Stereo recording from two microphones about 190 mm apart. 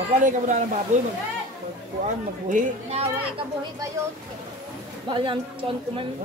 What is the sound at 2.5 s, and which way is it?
Speech, 35° right (ahead or behind).